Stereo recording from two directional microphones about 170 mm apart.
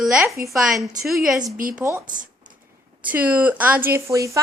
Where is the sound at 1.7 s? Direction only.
10° right (ahead or behind).